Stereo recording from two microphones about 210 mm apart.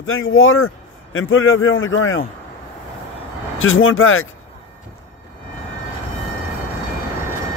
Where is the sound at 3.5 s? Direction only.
75° left (ahead or behind).